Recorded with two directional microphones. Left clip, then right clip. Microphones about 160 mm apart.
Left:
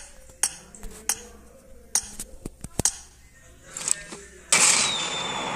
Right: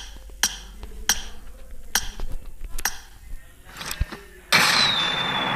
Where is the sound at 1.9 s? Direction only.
Centre (ahead or behind).